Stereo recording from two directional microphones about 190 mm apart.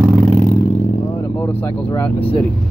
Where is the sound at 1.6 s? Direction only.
10° left (ahead or behind).